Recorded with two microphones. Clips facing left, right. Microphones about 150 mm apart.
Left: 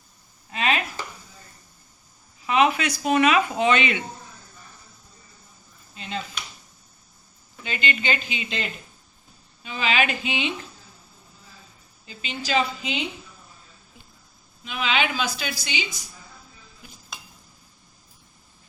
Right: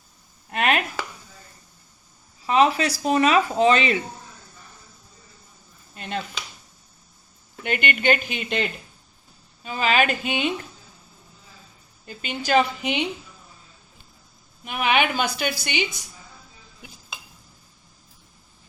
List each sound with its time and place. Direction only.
0.5 s chopping: 60° right (ahead or behind)
2.5 s speech: 35° right (ahead or behind)
5.9 s a sound: 55° right (ahead or behind)
7.6 s a woman's voice: 60° right (ahead or behind)
9.6 s a woman's voice: 45° right (ahead or behind)
12.0 s a woman's voice: 55° right (ahead or behind)
14.6 s a woman's voice: 55° right (ahead or behind)